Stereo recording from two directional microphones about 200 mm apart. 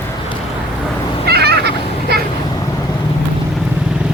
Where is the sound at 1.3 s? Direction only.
55° right (ahead or behind).